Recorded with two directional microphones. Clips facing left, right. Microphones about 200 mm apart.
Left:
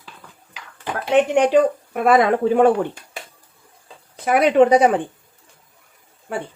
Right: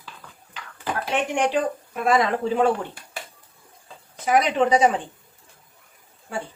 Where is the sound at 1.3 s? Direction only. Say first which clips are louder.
Left 7 dB; 60° left (ahead or behind).